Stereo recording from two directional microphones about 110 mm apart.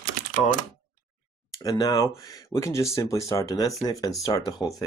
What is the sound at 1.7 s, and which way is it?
Speech, 35° left (ahead or behind).